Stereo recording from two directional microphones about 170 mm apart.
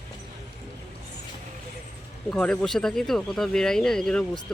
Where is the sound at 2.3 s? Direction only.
5° left (ahead or behind).